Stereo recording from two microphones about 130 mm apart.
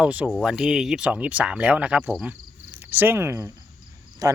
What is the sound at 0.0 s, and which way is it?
Speech, 10° right (ahead or behind).